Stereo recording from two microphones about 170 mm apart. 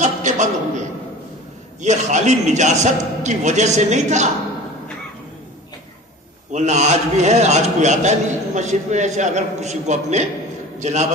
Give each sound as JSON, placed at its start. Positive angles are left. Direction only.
{"t": 0.0, "sound": "a sound", "side_deg": -45}
{"t": 1.8, "sound": "a man's voice", "side_deg": -45}
{"t": 6.5, "sound": "a man's voice", "side_deg": -45}